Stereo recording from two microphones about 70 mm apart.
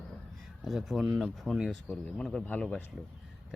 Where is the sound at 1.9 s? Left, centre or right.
Centre.